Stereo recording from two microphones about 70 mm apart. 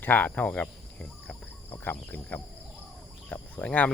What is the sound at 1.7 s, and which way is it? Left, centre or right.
Speech, left.